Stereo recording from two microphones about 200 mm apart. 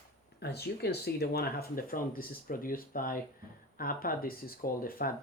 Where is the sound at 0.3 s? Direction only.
55° left (ahead or behind).